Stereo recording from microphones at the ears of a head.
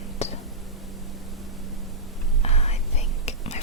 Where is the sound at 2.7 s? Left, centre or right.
Left.